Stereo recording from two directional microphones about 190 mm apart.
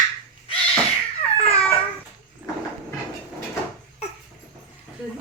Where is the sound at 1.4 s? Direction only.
30° left (ahead or behind).